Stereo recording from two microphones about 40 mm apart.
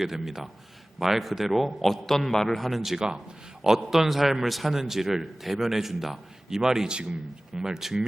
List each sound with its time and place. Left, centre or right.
0.0 s a man's voice: centre